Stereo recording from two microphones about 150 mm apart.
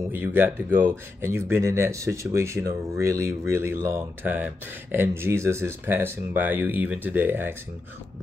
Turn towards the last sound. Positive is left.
turn(degrees=-15)  # may be behind; listen again after turning